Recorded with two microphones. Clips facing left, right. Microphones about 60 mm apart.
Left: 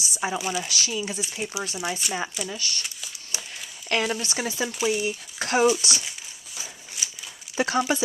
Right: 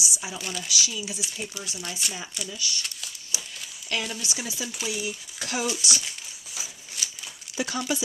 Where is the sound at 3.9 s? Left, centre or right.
Left.